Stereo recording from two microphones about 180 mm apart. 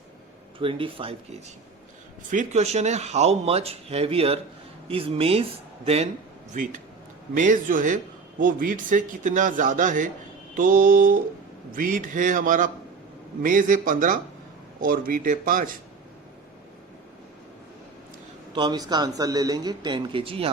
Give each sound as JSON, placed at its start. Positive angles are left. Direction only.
{"t": 0.6, "sound": "a man's voice", "side_deg": -30}
{"t": 6.5, "sound": "a man's voice", "side_deg": -45}
{"t": 18.5, "sound": "a man's voice", "side_deg": -25}